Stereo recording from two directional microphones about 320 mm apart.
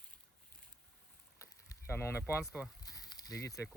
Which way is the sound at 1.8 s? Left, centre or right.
Centre.